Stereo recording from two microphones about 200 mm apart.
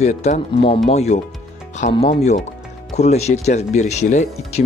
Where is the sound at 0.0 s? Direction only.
35° left (ahead or behind).